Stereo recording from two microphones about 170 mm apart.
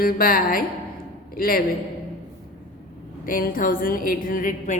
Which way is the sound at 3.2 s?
55° left (ahead or behind).